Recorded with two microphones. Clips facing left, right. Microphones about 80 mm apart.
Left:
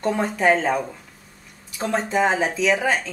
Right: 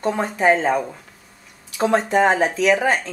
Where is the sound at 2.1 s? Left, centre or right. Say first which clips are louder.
Even; right.